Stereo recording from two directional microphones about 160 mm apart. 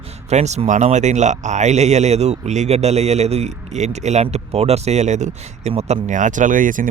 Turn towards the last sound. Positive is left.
turn(degrees=-55)  # may be behind; listen again after turning